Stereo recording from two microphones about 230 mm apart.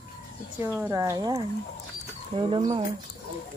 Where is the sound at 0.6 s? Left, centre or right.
Centre.